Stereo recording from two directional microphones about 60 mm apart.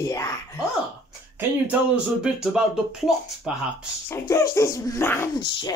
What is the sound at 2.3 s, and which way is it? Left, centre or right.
Speech, centre.